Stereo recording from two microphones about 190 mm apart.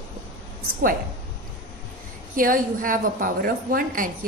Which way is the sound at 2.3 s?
45° right (ahead or behind).